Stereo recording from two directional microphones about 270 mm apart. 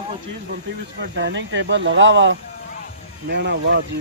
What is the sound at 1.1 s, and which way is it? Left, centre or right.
Speech, right.